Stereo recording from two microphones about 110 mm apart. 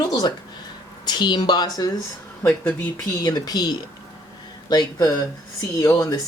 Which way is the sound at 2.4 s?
20° left (ahead or behind).